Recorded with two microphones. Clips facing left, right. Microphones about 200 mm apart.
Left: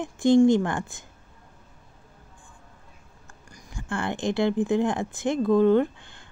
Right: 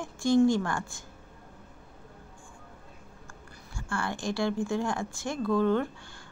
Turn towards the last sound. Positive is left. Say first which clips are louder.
# left 7 dB
turn(degrees=20)  # may be behind; listen again after turning